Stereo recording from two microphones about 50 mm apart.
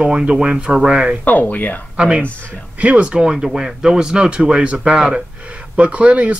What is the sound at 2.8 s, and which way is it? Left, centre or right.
Speech, right.